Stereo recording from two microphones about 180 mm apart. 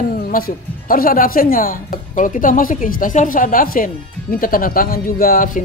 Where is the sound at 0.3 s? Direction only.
55° left (ahead or behind).